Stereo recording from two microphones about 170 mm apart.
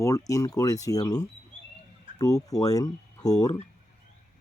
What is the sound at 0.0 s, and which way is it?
Speech, 20° left (ahead or behind).